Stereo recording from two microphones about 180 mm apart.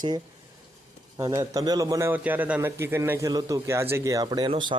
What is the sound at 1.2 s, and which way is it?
A man's voice, 20° right (ahead or behind).